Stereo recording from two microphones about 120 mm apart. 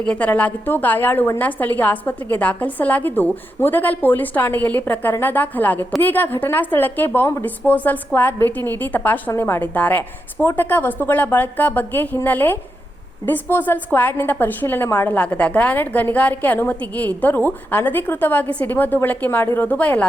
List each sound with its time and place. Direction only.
0.0 s a woman's voice: 10° left (ahead or behind)